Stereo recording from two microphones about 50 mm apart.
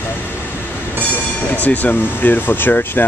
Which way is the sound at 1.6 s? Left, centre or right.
Left.